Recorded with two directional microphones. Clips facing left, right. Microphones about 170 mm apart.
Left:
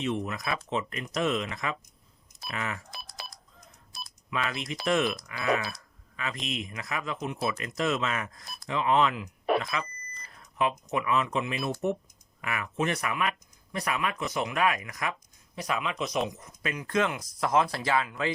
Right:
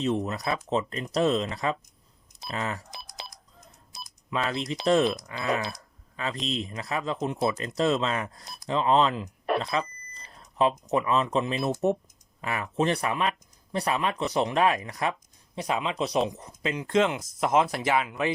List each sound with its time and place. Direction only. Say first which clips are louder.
0.0 s speech: right 4 dB; 35° right (ahead or behind)
2.9 s cash register: right 1 dB; 20° right (ahead or behind)
3.9 s speech: right 3 dB; 25° right (ahead or behind)
5.7 s a sound: right 3 dB; 30° right (ahead or behind)
6.4 s speech: right 4 dB; 30° right (ahead or behind)